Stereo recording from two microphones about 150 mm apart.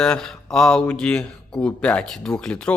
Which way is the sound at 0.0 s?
5° left (ahead or behind).